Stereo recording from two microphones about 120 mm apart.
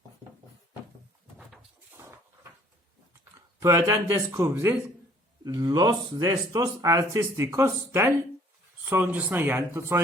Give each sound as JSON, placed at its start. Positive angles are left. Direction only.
{"t": 1.9, "sound": "a sound", "side_deg": -25}
{"t": 3.3, "sound": "speech", "side_deg": -25}
{"t": 5.5, "sound": "speech", "side_deg": -30}